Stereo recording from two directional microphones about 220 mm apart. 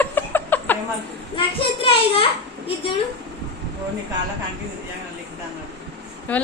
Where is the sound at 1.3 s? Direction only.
25° left (ahead or behind).